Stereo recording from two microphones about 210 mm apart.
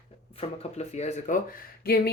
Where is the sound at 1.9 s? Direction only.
50° left (ahead or behind).